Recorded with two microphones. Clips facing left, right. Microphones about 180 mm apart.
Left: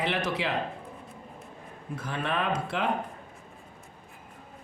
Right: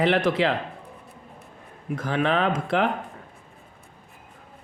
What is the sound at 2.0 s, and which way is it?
Speech, 85° right.